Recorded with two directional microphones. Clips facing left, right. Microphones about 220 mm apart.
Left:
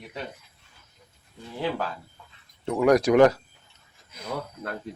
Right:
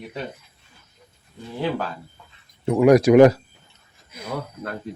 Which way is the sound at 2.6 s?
10° right (ahead or behind).